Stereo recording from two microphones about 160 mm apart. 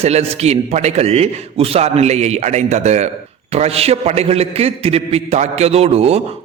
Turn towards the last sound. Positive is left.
turn(degrees=-40)  # may be behind; listen again after turning